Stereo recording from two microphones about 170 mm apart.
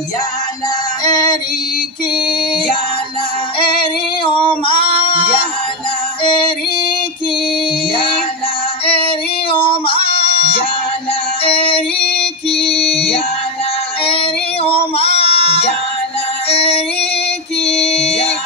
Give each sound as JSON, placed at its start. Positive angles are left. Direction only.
{"t": 1.0, "sound": "female singing", "side_deg": 25}
{"t": 6.2, "sound": "music", "side_deg": 30}
{"t": 7.9, "sound": "music", "side_deg": 30}
{"t": 9.5, "sound": "music", "side_deg": 30}
{"t": 12.4, "sound": "female singing", "side_deg": 35}
{"t": 16.4, "sound": "music", "side_deg": 35}
{"t": 17.6, "sound": "female singing", "side_deg": 40}